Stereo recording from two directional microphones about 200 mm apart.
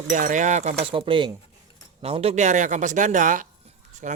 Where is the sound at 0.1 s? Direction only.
40° right (ahead or behind).